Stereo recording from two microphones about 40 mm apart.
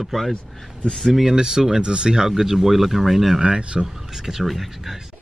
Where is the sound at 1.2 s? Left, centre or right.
Centre.